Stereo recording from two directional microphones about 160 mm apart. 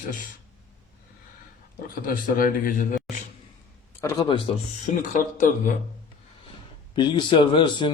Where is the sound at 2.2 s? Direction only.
55° left (ahead or behind).